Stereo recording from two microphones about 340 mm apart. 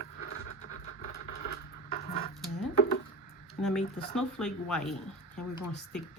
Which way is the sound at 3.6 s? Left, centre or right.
Centre.